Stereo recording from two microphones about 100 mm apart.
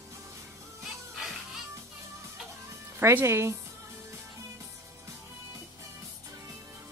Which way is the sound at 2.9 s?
25° right (ahead or behind).